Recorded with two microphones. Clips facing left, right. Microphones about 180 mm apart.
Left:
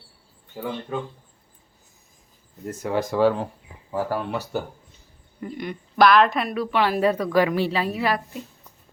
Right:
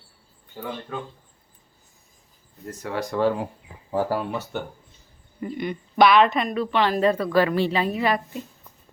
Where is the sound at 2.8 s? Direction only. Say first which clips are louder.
Left 4 dB; 20° left (ahead or behind).